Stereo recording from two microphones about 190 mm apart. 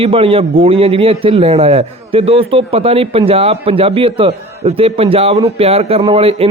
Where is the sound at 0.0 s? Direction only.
30° right (ahead or behind).